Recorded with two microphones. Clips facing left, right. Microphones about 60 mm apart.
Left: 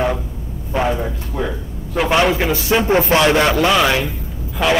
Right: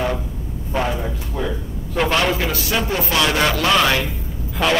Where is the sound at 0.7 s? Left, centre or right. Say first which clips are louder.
Left 3 dB; centre.